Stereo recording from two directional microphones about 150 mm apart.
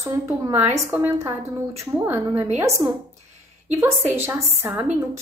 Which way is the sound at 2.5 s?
20° right (ahead or behind).